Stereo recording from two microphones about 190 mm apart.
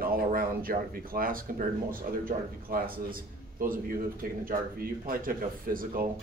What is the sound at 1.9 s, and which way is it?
A man's voice, 50° right (ahead or behind).